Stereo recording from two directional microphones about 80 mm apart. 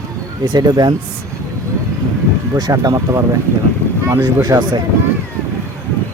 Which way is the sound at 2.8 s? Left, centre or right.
Right.